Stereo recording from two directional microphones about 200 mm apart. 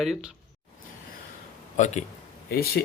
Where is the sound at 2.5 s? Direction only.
50° left (ahead or behind).